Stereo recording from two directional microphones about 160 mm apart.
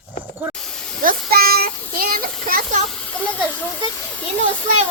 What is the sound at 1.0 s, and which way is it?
A child's voice, 65° right (ahead or behind).